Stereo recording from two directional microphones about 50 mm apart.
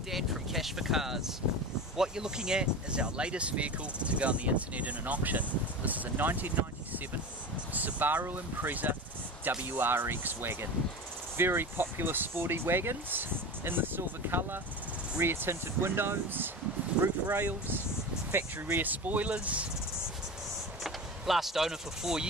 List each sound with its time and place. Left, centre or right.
0.1 s speech: centre; by 18.9 s right
18.9 s speech: right
20.8 s speech: centre